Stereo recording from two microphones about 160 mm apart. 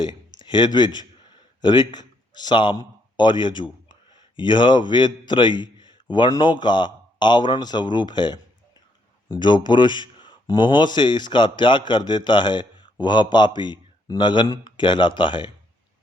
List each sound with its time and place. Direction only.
0.4 s a man's voice: 30° left (ahead or behind)